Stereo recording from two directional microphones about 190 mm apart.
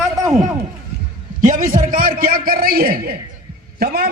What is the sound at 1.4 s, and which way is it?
A man's voice, 45° right (ahead or behind).